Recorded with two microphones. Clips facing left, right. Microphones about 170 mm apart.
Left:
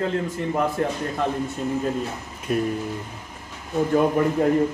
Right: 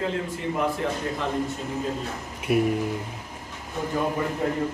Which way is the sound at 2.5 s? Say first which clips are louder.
Right 1 dB; 10° right (ahead or behind).